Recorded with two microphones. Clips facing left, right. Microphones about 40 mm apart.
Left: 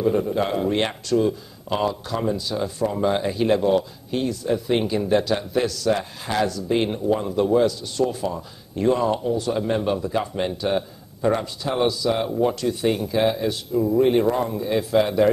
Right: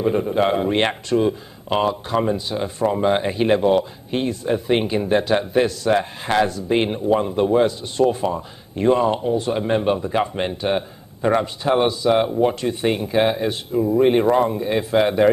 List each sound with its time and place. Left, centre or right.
0.0 s speech: right